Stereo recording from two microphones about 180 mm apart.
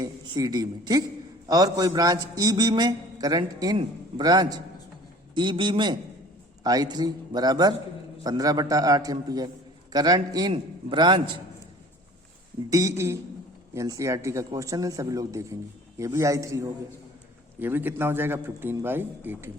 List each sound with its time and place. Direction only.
0.0 s a man's voice: 20° right (ahead or behind)
12.7 s a man's voice: 15° right (ahead or behind)